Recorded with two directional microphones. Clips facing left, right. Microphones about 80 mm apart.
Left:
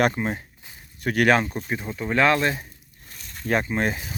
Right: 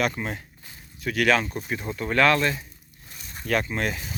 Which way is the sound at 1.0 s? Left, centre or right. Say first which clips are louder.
Left 3 dB; left.